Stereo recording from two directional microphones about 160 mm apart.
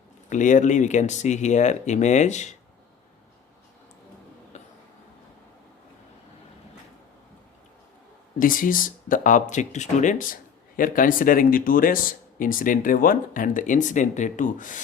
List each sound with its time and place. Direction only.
0.3 s speech: 50° left (ahead or behind)
4.5 s a sound: 45° left (ahead or behind)
8.4 s speech: 60° left (ahead or behind)